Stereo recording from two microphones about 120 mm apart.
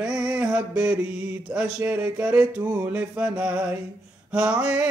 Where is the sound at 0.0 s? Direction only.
5° right (ahead or behind).